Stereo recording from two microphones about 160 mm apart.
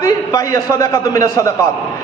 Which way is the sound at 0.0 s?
20° left (ahead or behind).